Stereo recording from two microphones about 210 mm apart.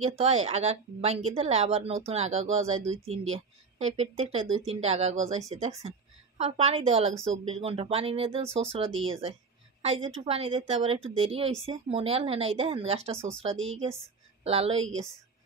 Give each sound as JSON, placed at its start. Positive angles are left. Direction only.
{"t": 0.2, "sound": "a woman's voice", "side_deg": -30}
{"t": 9.8, "sound": "a sound", "side_deg": -30}
{"t": 10.0, "sound": "speech", "side_deg": -25}
{"t": 14.4, "sound": "speech", "side_deg": -30}